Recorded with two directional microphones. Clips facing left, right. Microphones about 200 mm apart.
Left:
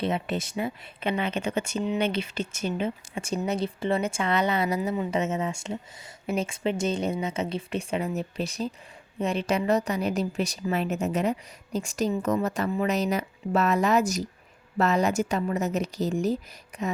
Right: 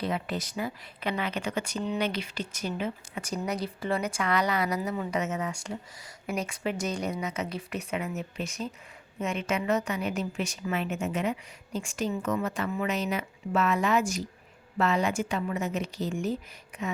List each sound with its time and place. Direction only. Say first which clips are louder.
0.0 s a woman's voice: left 3 dB; 25° left (ahead or behind)